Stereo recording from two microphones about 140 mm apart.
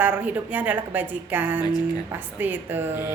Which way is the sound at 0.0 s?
10° right (ahead or behind).